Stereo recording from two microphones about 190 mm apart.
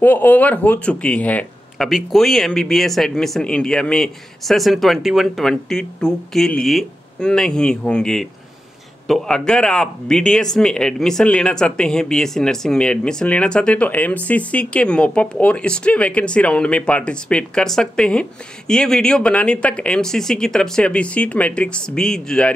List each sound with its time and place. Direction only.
0.0 s speech: 10° left (ahead or behind)